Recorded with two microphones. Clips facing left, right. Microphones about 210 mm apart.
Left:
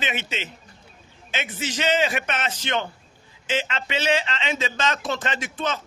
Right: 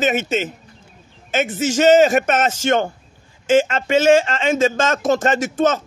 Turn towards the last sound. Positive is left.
turn(degrees=-45)  # may be behind; listen again after turning